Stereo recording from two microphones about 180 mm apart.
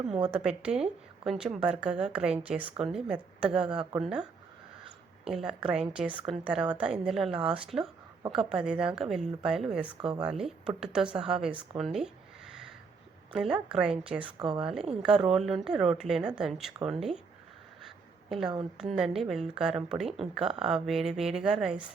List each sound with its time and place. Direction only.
0.3 s a woman's voice: 5° right (ahead or behind)
5.3 s a woman's voice: 5° right (ahead or behind)
11.8 s a sound: centre (ahead or behind)
13.3 s a woman's voice: 5° right (ahead or behind)
14.3 s a woman's voice: 25° right (ahead or behind)
14.6 s a woman's voice: 5° right (ahead or behind)
17.8 s a sound: centre (ahead or behind)
18.8 s a woman's voice: centre (ahead or behind)